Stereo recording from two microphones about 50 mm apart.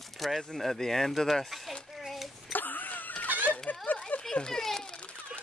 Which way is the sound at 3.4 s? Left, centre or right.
Left.